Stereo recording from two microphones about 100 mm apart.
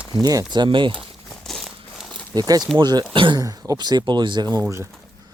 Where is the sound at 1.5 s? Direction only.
Centre (ahead or behind).